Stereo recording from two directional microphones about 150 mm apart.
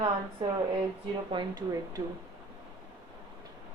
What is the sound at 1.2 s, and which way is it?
Speech, 30° right (ahead or behind).